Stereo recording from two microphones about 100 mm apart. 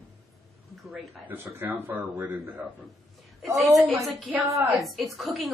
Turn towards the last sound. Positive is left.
turn(degrees=0)  # may be behind; listen again after turning